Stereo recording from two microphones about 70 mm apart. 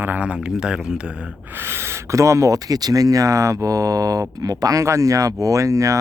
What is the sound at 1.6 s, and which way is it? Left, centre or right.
Speech, right.